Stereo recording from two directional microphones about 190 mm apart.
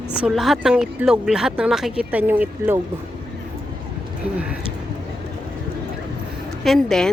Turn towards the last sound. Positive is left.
turn(degrees=0)  # may be behind; listen again after turning